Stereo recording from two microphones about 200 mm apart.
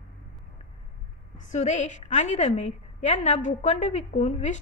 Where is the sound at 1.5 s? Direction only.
35° left (ahead or behind).